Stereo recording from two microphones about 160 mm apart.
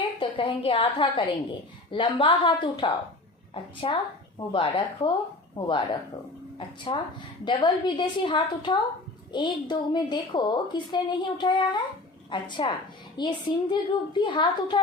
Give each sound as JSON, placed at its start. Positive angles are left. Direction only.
{"t": 0.2, "sound": "a woman's voice", "side_deg": 35}